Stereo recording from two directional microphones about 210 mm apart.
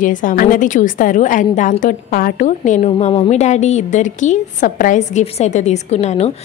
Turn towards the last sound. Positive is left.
turn(degrees=30)  # may be behind; listen again after turning